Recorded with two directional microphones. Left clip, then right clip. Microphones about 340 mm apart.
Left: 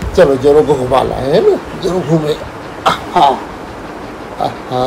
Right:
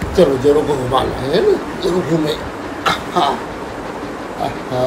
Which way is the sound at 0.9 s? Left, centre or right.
Centre.